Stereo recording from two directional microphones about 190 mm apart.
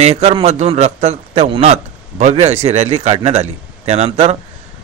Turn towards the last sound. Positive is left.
turn(degrees=-35)  # may be behind; listen again after turning